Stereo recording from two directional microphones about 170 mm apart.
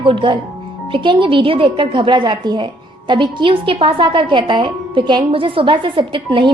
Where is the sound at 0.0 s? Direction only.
30° right (ahead or behind).